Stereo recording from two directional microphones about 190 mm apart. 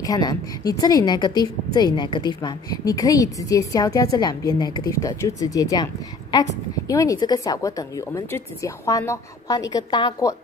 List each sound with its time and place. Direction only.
0.0 s a woman's voice: 20° left (ahead or behind)